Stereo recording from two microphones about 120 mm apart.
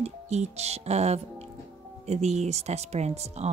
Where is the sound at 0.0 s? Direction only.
65° right (ahead or behind).